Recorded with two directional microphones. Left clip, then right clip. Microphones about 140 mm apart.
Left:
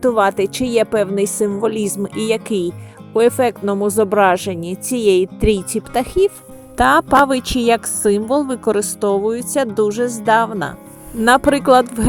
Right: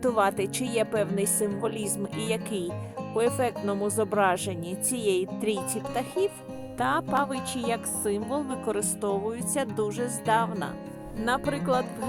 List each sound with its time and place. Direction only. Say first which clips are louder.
0.0 s speech: left 10 dB; 10° left (ahead or behind)
6.7 s speech: left 14 dB; 40° left (ahead or behind); by 10.7 s 20° left (ahead or behind)
11.2 s speech: left 15 dB; 40° left (ahead or behind)